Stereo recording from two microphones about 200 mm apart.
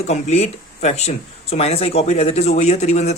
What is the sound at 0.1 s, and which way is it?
Speech, 35° left (ahead or behind).